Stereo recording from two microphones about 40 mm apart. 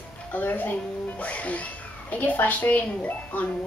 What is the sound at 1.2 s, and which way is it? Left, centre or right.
Speech, left.